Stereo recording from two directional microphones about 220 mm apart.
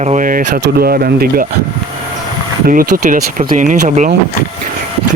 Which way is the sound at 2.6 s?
40° right (ahead or behind).